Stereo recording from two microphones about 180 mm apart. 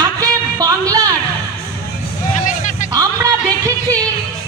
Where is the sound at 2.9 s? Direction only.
20° right (ahead or behind).